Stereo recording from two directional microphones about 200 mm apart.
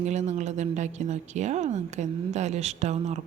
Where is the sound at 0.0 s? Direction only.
35° right (ahead or behind).